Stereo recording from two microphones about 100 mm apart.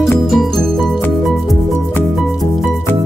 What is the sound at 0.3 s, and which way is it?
Music, centre (ahead or behind).